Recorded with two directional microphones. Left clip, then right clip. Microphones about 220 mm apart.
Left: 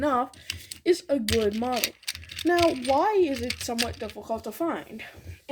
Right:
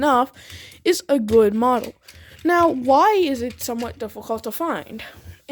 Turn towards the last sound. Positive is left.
turn(degrees=-65)  # may be behind; listen again after turning